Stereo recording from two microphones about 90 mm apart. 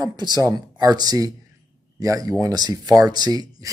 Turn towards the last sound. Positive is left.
turn(degrees=-45)  # may be behind; listen again after turning